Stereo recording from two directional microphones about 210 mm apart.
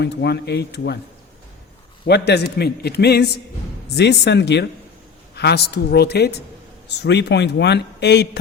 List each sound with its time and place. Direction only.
0.0 s a man's voice: 55° left (ahead or behind)
2.0 s a man's voice: 50° left (ahead or behind)